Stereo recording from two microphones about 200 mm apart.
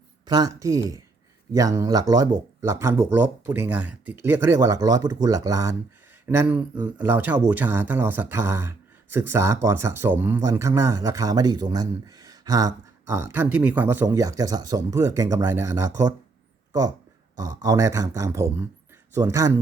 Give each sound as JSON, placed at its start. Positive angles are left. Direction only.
{"t": 0.3, "sound": "speech", "side_deg": -20}
{"t": 17.6, "sound": "speech", "side_deg": -15}